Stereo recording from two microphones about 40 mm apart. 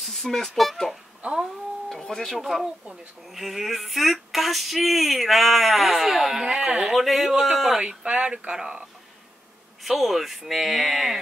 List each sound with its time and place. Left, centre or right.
0.0 s speech: centre
1.2 s a sound: right
1.9 s a sound: centre
2.2 s female singing: centre
6.6 s speech: right
6.9 s female singing: centre
7.2 s a man's voice: centre
7.5 s female singing: centre
8.0 s speech: right
9.8 s female singing: centre